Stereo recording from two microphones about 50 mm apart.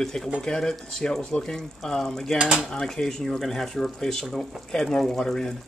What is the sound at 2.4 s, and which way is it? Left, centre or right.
Speech, centre.